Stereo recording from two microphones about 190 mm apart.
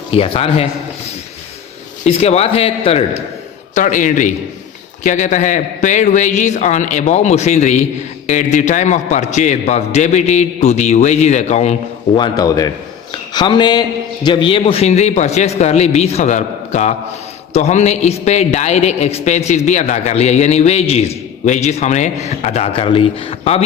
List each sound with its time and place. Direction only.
0.1 s a man's voice: 30° left (ahead or behind)
2.0 s a man's voice: 35° left (ahead or behind)
3.8 s a man's voice: 40° left (ahead or behind)
12.1 s a man's voice: 20° left (ahead or behind)